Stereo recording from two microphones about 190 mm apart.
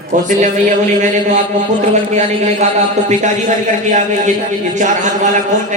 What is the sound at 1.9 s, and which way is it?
Speech, 35° right (ahead or behind).